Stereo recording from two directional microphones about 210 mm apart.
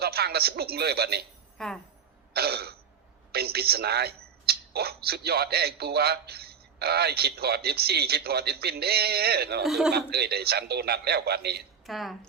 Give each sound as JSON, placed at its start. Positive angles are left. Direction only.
{"t": 0.0, "sound": "speech", "side_deg": -50}
{"t": 1.5, "sound": "speech", "side_deg": 0}
{"t": 2.3, "sound": "throat clearing", "side_deg": -50}
{"t": 3.3, "sound": "speech", "side_deg": -50}
{"t": 9.6, "sound": "a man's voice", "side_deg": 0}
{"t": 9.9, "sound": "speech", "side_deg": -50}
{"t": 11.9, "sound": "a man's voice", "side_deg": 0}